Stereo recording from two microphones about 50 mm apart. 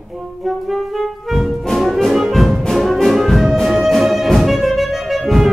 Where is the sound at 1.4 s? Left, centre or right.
Centre.